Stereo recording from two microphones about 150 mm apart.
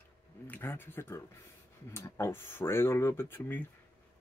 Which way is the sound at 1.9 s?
15° left (ahead or behind).